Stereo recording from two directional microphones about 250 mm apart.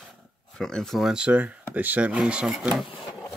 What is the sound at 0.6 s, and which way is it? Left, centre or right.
Speech, centre.